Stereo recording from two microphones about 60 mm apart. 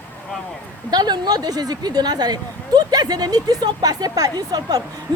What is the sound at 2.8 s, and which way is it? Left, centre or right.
Speech, right.